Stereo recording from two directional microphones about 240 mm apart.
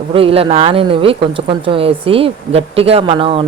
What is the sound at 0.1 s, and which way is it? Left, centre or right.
Speech, right.